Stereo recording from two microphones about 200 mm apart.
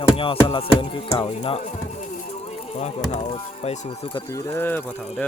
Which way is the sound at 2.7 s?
35° left (ahead or behind).